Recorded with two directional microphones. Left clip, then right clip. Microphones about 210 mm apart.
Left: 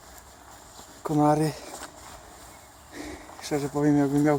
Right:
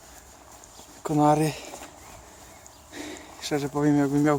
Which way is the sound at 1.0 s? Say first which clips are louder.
Right 1 dB; 5° right (ahead or behind).